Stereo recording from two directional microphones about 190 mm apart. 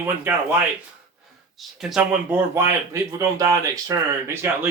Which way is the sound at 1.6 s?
Centre (ahead or behind).